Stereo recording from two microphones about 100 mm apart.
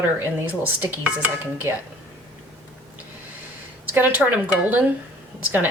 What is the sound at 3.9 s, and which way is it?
Speech, 20° right (ahead or behind).